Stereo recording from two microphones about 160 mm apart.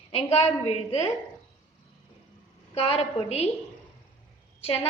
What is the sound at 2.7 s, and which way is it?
Speech, 40° left (ahead or behind).